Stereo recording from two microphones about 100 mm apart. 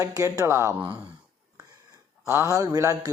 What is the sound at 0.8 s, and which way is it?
Speech, 15° right (ahead or behind).